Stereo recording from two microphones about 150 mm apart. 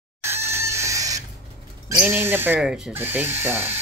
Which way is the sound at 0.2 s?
15° right (ahead or behind).